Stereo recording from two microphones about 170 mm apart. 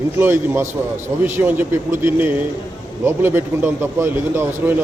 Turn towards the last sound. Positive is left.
turn(degrees=-15)  # may be behind; listen again after turning